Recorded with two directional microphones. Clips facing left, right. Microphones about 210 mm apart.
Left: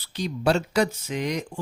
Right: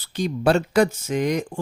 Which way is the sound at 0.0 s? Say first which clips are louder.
Right 4 dB; 50° right (ahead or behind).